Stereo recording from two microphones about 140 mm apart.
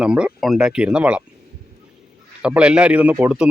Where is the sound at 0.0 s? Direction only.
5° right (ahead or behind).